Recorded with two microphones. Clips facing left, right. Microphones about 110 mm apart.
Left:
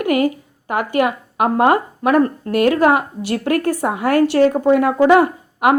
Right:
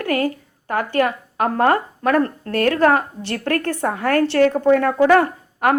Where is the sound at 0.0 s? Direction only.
15° left (ahead or behind).